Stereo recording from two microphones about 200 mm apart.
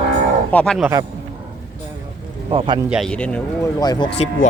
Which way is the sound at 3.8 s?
20° left (ahead or behind).